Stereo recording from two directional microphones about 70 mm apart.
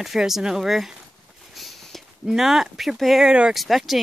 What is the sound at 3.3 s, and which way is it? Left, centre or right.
Speech, centre.